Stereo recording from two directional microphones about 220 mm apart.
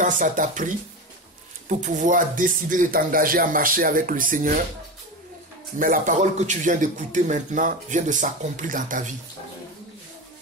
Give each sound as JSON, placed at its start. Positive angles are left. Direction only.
{"t": 0.0, "sound": "speech", "side_deg": -35}
{"t": 5.8, "sound": "speech", "side_deg": -35}